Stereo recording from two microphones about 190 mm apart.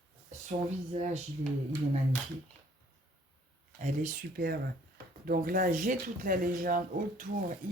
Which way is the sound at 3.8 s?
40° right (ahead or behind).